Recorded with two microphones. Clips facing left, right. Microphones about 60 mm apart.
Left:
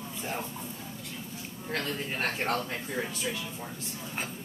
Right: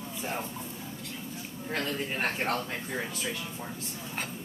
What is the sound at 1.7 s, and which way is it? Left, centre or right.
Speech, centre.